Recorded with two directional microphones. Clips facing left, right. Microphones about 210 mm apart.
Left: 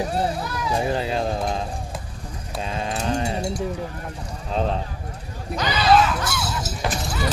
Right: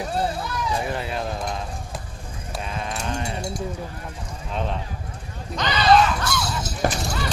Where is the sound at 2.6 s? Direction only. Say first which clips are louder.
Left 4 dB; 30° left (ahead or behind).